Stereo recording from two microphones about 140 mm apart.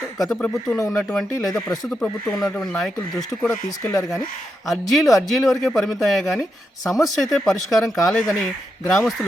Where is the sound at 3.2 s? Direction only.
15° left (ahead or behind).